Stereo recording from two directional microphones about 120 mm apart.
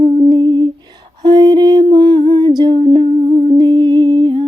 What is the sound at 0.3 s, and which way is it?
Lullaby, 35° right (ahead or behind).